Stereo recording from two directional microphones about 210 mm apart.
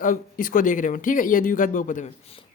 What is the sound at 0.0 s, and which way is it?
Speech, 40° left (ahead or behind).